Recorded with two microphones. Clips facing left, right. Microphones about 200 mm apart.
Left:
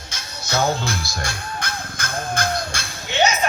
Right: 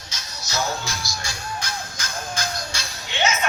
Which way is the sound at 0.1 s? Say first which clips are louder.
Left 5 dB; 55° left (ahead or behind).